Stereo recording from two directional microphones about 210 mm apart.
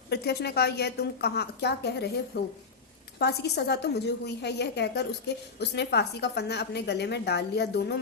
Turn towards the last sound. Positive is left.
turn(degrees=50)  # may be behind; listen again after turning